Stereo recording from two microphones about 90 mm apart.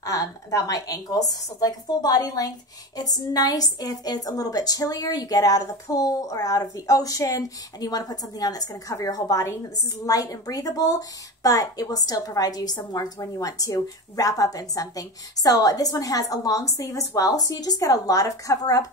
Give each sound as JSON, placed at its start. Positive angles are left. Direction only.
{"t": 0.0, "sound": "a woman's voice", "side_deg": 35}